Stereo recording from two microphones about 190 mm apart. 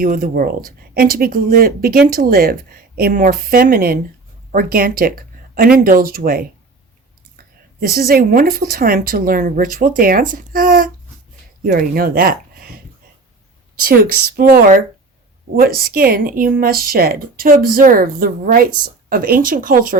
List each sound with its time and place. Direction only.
0.0 s speech: 50° right (ahead or behind)